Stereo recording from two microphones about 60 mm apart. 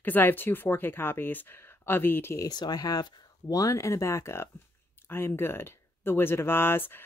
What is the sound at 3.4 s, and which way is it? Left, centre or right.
Speech, left.